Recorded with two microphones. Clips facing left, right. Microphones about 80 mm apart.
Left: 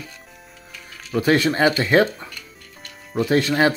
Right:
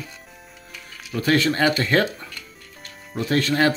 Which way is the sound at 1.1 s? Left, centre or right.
Centre.